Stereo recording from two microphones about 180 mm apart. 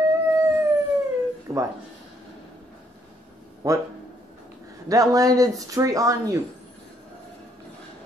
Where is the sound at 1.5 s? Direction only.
30° right (ahead or behind).